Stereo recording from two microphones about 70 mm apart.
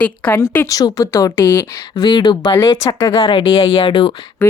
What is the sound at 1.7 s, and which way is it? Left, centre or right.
Speech, left.